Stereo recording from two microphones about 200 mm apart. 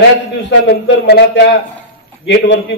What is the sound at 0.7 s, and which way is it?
A man's voice, 55° left (ahead or behind).